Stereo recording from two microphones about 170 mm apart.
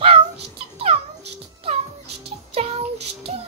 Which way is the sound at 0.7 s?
35° right (ahead or behind).